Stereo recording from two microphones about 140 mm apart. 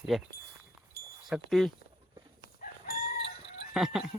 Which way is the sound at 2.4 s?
90° left.